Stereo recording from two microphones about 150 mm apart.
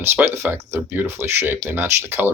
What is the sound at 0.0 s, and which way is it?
Speech, 15° right (ahead or behind).